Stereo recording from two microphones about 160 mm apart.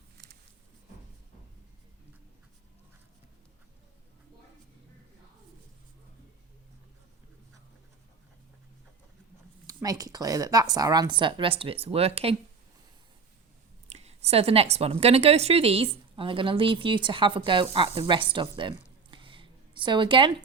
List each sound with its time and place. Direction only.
9.6 s a woman's voice: 25° right (ahead or behind); by 12.4 s 40° right (ahead or behind)
13.9 s a woman's voice: 40° right (ahead or behind)
19.1 s a sound: 35° right (ahead or behind)